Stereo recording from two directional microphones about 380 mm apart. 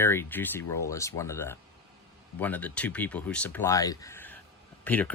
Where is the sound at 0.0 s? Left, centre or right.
Centre.